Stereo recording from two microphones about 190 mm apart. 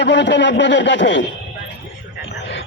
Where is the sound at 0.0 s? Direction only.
70° left (ahead or behind).